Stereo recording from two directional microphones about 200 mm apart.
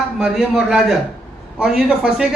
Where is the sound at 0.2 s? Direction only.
5° right (ahead or behind).